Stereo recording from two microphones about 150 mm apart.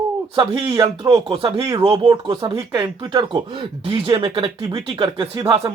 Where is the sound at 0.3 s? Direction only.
35° right (ahead or behind).